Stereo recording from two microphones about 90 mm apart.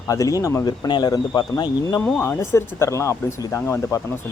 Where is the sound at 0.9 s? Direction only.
55° left (ahead or behind).